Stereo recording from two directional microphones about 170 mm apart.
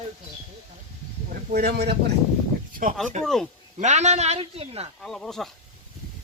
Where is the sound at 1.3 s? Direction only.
60° right (ahead or behind).